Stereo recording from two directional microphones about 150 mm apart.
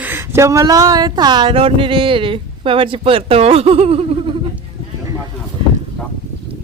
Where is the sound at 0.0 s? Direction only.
15° right (ahead or behind); by 4.4 s 40° right (ahead or behind).